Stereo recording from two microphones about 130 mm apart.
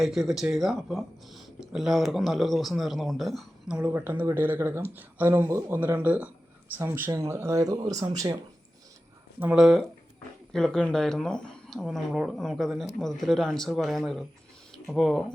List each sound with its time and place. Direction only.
0.0 s speech: centre (ahead or behind); by 8.4 s 25° right (ahead or behind)
9.4 s speech: 5° right (ahead or behind)